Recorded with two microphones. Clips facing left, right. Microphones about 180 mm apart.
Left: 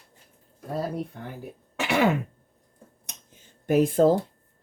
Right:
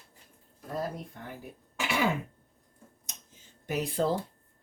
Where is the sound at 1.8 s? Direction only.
65° left (ahead or behind).